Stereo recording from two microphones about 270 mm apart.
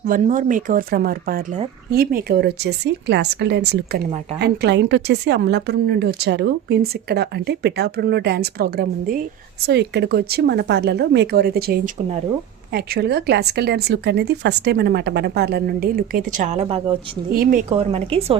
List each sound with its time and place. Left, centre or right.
0.0 s a woman's voice: right
17.3 s a woman's voice: right